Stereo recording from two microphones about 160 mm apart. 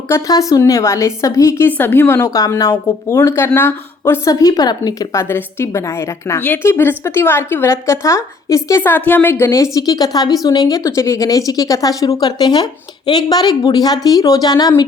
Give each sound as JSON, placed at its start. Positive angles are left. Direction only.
{"t": 0.1, "sound": "a woman's voice", "side_deg": 20}